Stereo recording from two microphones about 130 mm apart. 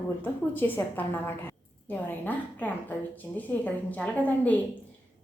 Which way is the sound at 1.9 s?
15° left (ahead or behind).